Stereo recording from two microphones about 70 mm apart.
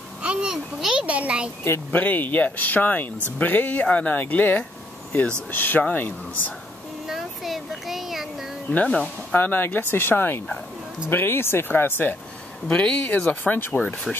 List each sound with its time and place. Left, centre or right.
0.2 s a child's voice: centre
1.0 s a child's voice: centre
1.6 s speech: left
2.0 s speech: left
7.1 s a sound: centre
9.3 s speech: left
12.6 s speech: centre